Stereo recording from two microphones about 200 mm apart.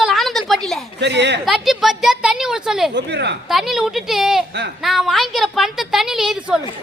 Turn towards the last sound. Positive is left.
turn(degrees=-5)  # may be behind; listen again after turning